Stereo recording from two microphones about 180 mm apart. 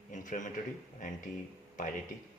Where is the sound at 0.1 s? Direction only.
45° left (ahead or behind).